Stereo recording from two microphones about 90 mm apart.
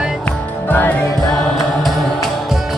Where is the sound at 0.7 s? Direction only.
20° left (ahead or behind).